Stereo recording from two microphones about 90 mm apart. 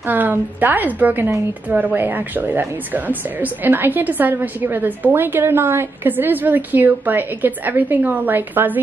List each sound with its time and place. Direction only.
0.0 s a woman's voice: 20° right (ahead or behind)